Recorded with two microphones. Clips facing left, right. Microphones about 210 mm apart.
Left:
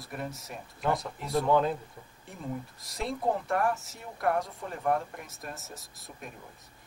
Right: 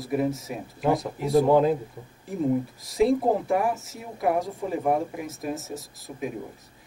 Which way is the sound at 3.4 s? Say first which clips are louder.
Right 4 dB; centre (ahead or behind).